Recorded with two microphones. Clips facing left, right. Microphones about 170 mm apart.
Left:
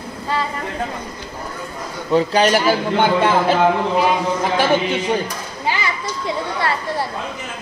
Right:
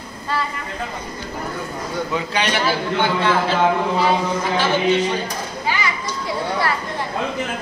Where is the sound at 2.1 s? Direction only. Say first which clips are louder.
Left 9 dB; 40° left (ahead or behind).